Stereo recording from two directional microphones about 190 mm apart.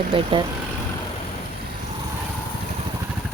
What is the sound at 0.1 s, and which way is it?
Speech, 25° right (ahead or behind).